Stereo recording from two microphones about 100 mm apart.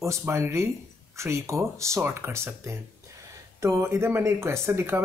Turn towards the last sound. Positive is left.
turn(degrees=-30)  # may be behind; listen again after turning